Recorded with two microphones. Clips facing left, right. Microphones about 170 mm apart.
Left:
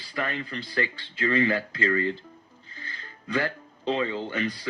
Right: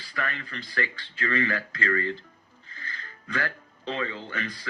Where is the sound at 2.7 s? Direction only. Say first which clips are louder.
Right 1 dB; 30° left (ahead or behind).